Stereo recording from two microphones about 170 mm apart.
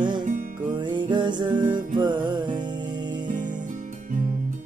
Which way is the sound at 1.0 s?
25° right (ahead or behind).